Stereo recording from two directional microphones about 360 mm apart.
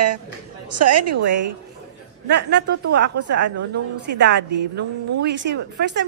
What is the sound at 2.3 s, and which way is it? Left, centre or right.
Speech, right.